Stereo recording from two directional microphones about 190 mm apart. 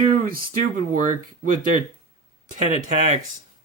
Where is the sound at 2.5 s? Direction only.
40° right (ahead or behind).